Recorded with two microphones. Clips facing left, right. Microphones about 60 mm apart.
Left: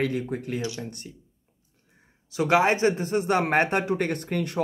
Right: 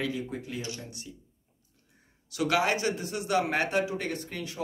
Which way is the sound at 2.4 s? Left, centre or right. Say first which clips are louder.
Left 6 dB; left.